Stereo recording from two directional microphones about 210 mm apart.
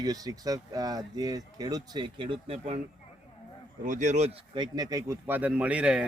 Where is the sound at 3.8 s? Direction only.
35° right (ahead or behind); by 6.1 s 5° right (ahead or behind).